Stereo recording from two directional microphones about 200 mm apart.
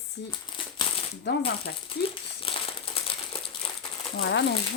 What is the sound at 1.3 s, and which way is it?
Speech, 60° left (ahead or behind).